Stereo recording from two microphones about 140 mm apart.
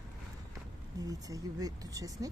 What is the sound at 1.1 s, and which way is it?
Speech, 25° right (ahead or behind).